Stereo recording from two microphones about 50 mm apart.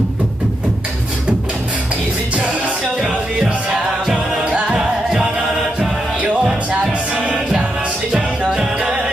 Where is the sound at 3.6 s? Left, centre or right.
Centre.